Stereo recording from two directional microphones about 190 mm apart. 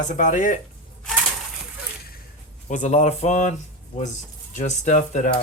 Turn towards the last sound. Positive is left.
turn(degrees=35)  # may be behind; listen again after turning